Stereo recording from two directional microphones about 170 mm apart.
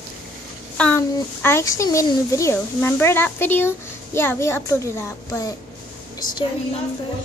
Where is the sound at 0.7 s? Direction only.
10° left (ahead or behind).